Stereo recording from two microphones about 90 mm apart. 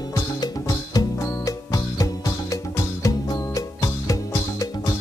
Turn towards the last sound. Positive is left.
turn(degrees=40)  # may be behind; listen again after turning